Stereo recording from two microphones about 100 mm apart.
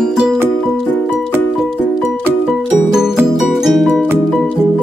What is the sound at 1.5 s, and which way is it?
Music, 5° right (ahead or behind).